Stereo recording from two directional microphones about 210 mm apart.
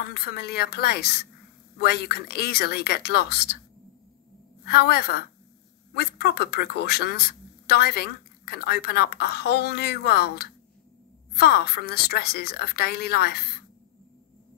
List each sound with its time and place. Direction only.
0.1 s speech: 50° left (ahead or behind)
4.6 s speech: 50° left (ahead or behind)